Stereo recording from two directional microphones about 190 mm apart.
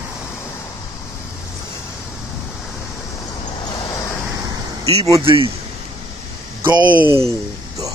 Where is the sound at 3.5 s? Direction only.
20° left (ahead or behind).